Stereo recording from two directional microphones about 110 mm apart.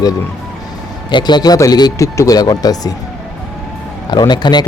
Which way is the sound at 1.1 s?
40° left (ahead or behind).